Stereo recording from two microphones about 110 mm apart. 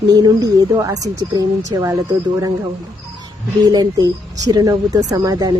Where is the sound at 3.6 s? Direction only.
35° right (ahead or behind).